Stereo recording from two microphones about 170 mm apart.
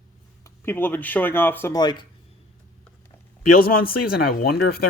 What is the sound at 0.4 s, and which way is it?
Speech, 15° left (ahead or behind).